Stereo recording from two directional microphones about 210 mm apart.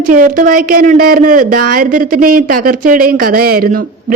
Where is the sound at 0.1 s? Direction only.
40° right (ahead or behind).